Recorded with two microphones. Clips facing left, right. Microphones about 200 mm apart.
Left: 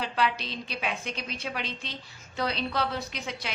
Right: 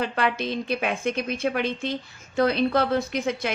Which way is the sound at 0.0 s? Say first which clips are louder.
Right 4 dB; 55° right (ahead or behind).